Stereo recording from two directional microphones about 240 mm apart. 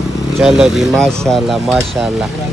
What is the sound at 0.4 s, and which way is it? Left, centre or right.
Speech, centre.